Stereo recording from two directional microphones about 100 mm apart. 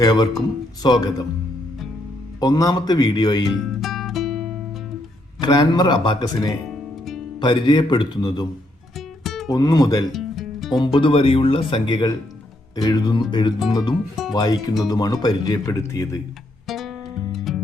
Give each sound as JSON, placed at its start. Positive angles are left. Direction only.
{"t": 0.0, "sound": "speech", "side_deg": 45}
{"t": 2.4, "sound": "speech", "side_deg": 40}
{"t": 3.6, "sound": "music", "side_deg": 0}
{"t": 5.4, "sound": "speech", "side_deg": 45}
{"t": 6.2, "sound": "speech", "side_deg": 40}
{"t": 6.7, "sound": "music", "side_deg": 0}
{"t": 7.3, "sound": "speech", "side_deg": 50}
{"t": 9.0, "sound": "music", "side_deg": 0}
{"t": 9.5, "sound": "speech", "side_deg": 40}
{"t": 10.1, "sound": "music", "side_deg": 0}
{"t": 10.8, "sound": "speech", "side_deg": 55}
{"t": 14.3, "sound": "speech", "side_deg": 40}
{"t": 16.6, "sound": "music", "side_deg": 0}